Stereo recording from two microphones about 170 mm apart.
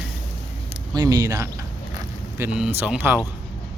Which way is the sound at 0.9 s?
25° right (ahead or behind).